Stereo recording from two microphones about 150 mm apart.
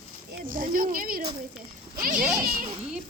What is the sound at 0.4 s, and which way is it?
Speech, 70° right (ahead or behind).